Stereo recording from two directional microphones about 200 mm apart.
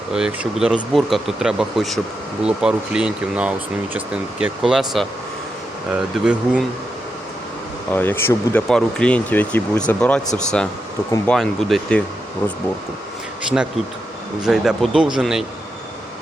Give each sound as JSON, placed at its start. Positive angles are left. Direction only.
{"t": 0.1, "sound": "speech", "side_deg": -5}
{"t": 7.9, "sound": "speech", "side_deg": 10}
{"t": 14.4, "sound": "speech", "side_deg": -5}